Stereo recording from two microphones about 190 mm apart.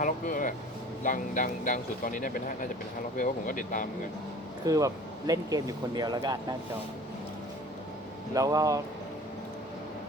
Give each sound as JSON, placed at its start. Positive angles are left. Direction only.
{"t": 0.0, "sound": "speech", "side_deg": 45}
{"t": 4.6, "sound": "speech", "side_deg": -20}
{"t": 8.3, "sound": "speech", "side_deg": -20}